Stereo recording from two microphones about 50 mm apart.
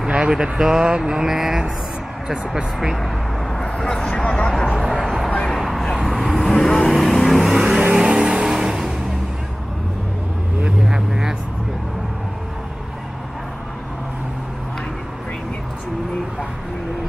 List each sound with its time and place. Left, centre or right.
0.0 s speech: centre
3.5 s vehicle: centre
4.1 s speech: left
5.0 s a sound: centre
5.9 s vehicle: centre
10.8 s vehicle: centre